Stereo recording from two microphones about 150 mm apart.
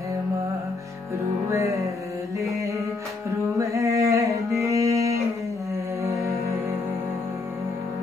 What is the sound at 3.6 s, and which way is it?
Music, 20° right (ahead or behind).